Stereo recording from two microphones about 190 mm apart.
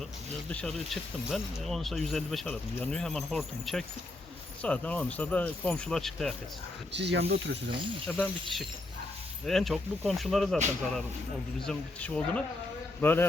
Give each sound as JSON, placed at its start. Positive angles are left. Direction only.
{"t": 0.4, "sound": "speech", "side_deg": 5}
{"t": 6.9, "sound": "speech", "side_deg": -65}
{"t": 8.0, "sound": "speech", "side_deg": 5}
{"t": 11.6, "sound": "speech", "side_deg": 5}